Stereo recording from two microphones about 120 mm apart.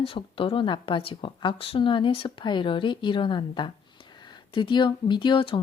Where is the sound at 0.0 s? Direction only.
50° left (ahead or behind).